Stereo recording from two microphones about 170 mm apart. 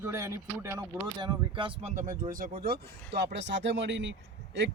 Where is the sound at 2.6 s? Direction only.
70° right (ahead or behind); by 4.7 s 90° right.